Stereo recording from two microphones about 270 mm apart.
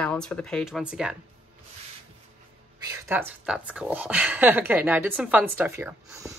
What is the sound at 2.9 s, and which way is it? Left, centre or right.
Speech, centre.